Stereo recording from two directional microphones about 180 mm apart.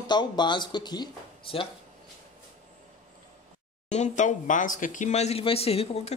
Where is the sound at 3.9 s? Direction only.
40° left (ahead or behind).